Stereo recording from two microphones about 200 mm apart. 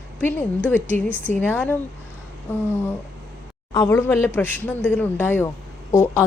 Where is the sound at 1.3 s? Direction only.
10° left (ahead or behind).